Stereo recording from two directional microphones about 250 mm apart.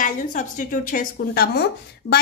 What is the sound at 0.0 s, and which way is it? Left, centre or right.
A woman's voice, left.